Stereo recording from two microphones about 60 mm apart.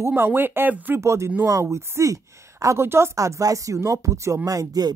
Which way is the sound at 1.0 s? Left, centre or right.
Right.